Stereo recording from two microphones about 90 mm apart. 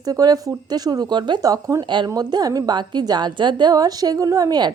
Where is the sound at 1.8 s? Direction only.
60° right (ahead or behind).